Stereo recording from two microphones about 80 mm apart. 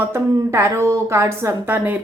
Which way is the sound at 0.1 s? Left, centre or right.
Right.